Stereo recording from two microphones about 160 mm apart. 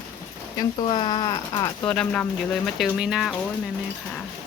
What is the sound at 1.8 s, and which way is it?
Speech, 5° left (ahead or behind).